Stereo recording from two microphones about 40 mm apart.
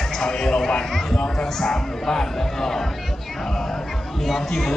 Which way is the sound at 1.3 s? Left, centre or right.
Centre.